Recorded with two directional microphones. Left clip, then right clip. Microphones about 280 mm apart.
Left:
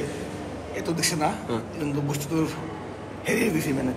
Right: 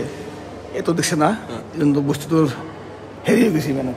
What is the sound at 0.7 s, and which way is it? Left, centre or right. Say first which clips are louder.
A man's voice: right 8 dB; right.